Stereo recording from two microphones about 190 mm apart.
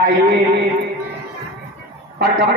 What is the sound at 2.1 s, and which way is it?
Speech, 55° right (ahead or behind).